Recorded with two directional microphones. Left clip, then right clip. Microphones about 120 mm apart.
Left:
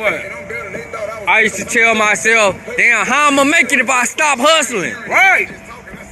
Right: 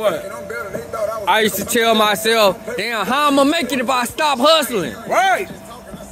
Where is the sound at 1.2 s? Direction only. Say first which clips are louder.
Left 5 dB; 40° right (ahead or behind).